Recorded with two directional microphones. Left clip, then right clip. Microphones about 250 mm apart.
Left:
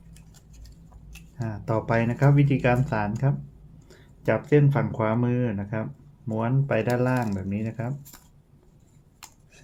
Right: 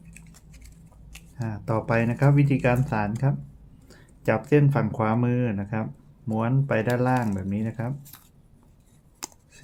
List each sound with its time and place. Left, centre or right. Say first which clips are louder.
1.4 s speech: even; centre